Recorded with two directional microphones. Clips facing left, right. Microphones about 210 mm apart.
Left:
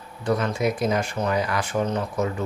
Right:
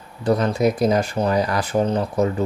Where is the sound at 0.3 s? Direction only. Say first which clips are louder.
Right 5 dB; 35° right (ahead or behind).